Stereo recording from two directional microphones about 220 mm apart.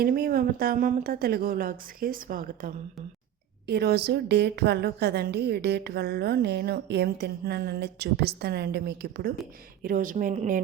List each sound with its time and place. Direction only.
0.0 s a woman's voice: 40° right (ahead or behind)